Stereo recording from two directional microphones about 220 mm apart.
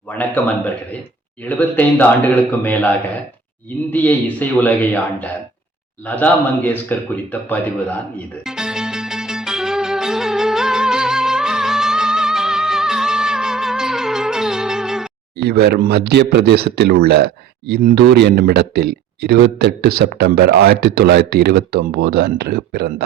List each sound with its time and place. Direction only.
0.1 s a man's voice: 10° left (ahead or behind)
3.9 s speech: 5° left (ahead or behind)
8.4 s music: 5° right (ahead or behind)
15.4 s speech: 50° right (ahead or behind)